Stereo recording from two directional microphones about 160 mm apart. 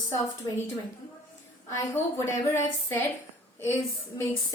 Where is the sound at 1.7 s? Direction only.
15° left (ahead or behind).